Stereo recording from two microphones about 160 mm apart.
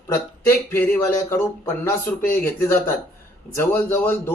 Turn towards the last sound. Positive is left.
turn(degrees=15)  # may be behind; listen again after turning